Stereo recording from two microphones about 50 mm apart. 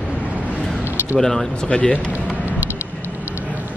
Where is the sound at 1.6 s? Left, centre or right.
Left.